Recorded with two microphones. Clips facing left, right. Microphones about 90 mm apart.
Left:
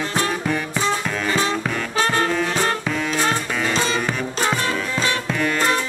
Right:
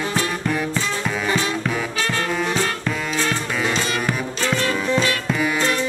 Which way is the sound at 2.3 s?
5° right (ahead or behind).